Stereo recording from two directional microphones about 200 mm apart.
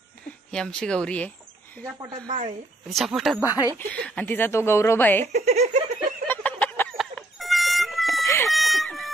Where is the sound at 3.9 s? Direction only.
5° left (ahead or behind).